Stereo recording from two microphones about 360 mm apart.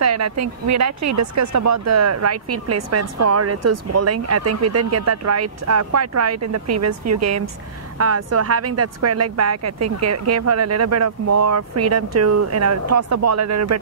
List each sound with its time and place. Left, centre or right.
0.0 s speech: right